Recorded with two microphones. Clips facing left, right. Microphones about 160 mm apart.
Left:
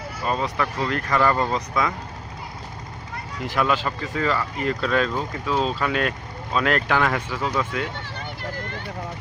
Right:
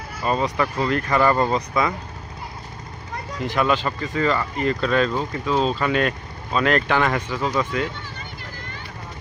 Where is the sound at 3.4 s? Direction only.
5° left (ahead or behind).